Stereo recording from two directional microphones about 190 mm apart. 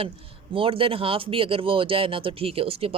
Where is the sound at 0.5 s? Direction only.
30° right (ahead or behind).